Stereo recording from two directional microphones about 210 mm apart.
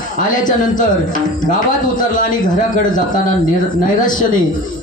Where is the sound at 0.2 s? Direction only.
40° left (ahead or behind).